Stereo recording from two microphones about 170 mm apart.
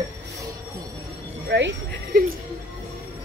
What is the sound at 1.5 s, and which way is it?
Speech, 80° right.